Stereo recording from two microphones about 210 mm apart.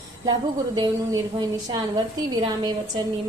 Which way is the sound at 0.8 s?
20° right (ahead or behind).